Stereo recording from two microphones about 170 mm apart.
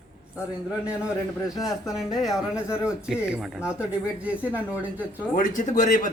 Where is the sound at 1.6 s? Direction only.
20° left (ahead or behind).